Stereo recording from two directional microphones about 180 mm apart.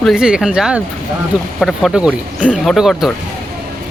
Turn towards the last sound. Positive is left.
turn(degrees=0)  # may be behind; listen again after turning